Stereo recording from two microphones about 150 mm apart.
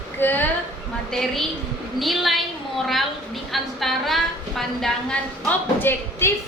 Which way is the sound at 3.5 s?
Centre (ahead or behind).